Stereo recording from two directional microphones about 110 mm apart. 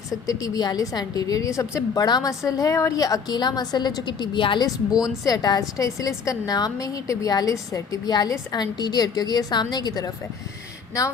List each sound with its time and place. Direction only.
0.1 s a woman's voice: 35° left (ahead or behind)
5.0 s a woman's voice: 35° left (ahead or behind)